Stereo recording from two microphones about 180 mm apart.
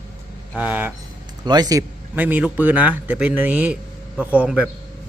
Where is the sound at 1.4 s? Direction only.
25° right (ahead or behind).